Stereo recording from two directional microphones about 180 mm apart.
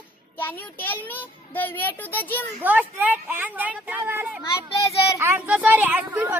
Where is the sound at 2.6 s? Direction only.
10° right (ahead or behind).